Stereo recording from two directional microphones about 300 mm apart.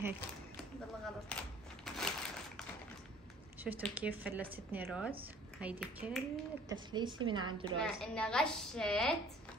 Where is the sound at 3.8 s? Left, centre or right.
Centre.